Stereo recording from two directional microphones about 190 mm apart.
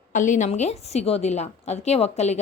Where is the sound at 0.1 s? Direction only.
40° left (ahead or behind).